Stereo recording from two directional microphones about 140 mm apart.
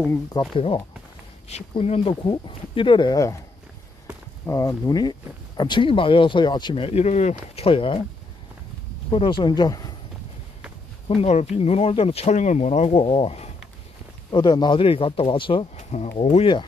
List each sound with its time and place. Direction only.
0.3 s speech: 35° left (ahead or behind)
1.5 s speech: 50° left (ahead or behind); by 3.3 s 25° left (ahead or behind)
4.5 s speech: 20° left (ahead or behind); by 8.0 s 40° left (ahead or behind)
9.1 s speech: 35° left (ahead or behind)
11.1 s speech: 50° left (ahead or behind)
14.3 s speech: 30° left (ahead or behind)
15.7 s speech: 55° left (ahead or behind)